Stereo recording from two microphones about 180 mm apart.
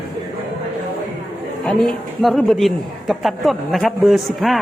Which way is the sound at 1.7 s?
Centre (ahead or behind).